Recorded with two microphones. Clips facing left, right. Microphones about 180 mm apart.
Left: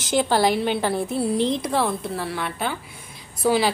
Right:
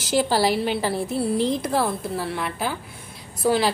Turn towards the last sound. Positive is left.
turn(degrees=0)  # may be behind; listen again after turning